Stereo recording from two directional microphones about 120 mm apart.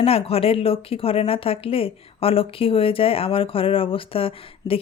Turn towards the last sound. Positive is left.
turn(degrees=50)  # may be behind; listen again after turning